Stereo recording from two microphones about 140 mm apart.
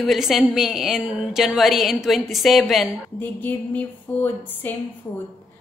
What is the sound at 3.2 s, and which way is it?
Speech, 10° left (ahead or behind).